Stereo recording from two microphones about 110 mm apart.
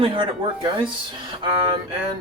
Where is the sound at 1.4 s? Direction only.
45° right (ahead or behind).